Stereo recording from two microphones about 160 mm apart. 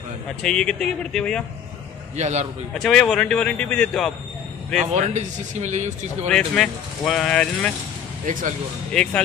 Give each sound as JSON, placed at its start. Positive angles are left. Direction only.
{"t": 0.4, "sound": "speech", "side_deg": 5}
{"t": 2.1, "sound": "speech", "side_deg": -45}
{"t": 2.8, "sound": "speech", "side_deg": 5}
{"t": 4.9, "sound": "speech", "side_deg": -45}
{"t": 6.3, "sound": "speech", "side_deg": 5}
{"t": 8.3, "sound": "speech", "side_deg": -55}
{"t": 8.9, "sound": "speech", "side_deg": 5}